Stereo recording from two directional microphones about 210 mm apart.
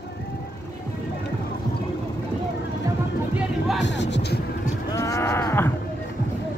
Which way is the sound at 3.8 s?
60° left (ahead or behind).